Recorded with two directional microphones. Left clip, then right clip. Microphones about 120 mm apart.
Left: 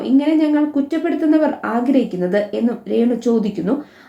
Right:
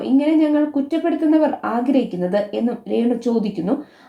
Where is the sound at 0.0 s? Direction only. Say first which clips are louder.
Left 1 dB; 30° right (ahead or behind).